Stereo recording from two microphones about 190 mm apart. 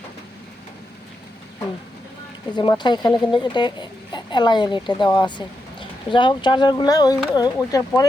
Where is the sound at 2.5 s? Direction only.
25° left (ahead or behind).